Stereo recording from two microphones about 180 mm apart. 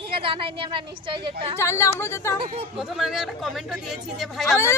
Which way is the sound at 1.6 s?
15° left (ahead or behind).